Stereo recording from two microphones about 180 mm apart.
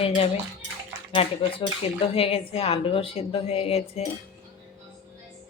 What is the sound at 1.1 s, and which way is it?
Speech, 30° left (ahead or behind).